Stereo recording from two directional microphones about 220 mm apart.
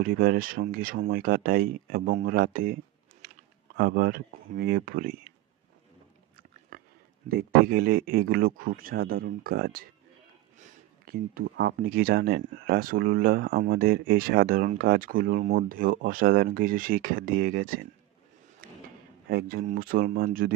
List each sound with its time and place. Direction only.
0.0 s speech: 40° right (ahead or behind)
6.3 s chewing: 40° right (ahead or behind)
7.3 s speech: 40° right (ahead or behind)
18.6 s a sound: 40° right (ahead or behind)
19.3 s speech: 45° right (ahead or behind)